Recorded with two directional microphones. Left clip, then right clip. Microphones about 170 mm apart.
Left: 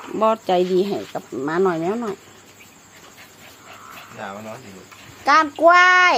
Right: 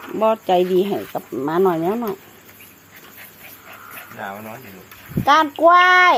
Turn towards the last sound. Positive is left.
turn(degrees=-15)  # may be behind; listen again after turning